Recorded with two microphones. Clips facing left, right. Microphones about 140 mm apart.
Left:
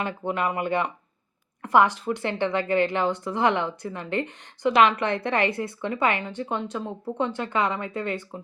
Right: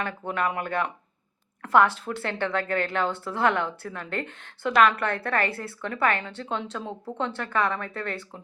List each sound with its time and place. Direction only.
0.0 s a woman's voice: 15° left (ahead or behind)